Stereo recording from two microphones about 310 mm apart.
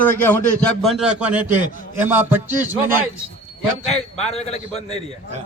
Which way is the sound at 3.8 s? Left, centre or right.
Centre.